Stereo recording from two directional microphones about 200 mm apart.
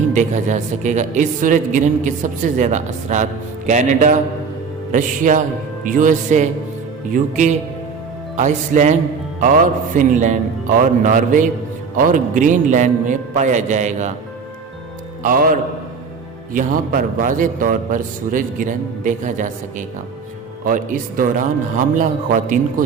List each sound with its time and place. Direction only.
0.1 s speech: 40° right (ahead or behind)
15.2 s a man's voice: 45° right (ahead or behind)
20.7 s a man's voice: 40° right (ahead or behind)